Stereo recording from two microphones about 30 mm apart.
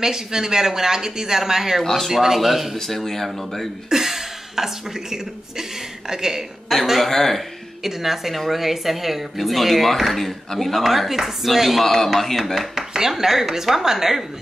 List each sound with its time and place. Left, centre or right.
0.0 s a woman's voice: centre
1.8 s speech: centre
2.2 s a woman's voice: centre
2.8 s speech: centre
3.9 s a woman's voice: centre
6.7 s speech: centre
7.8 s a woman's voice: centre
10.8 s a woman's voice: centre
11.8 s speech: centre
12.5 s a woman's voice: centre